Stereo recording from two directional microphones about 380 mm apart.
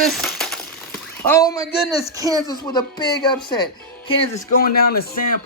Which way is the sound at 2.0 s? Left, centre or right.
Centre.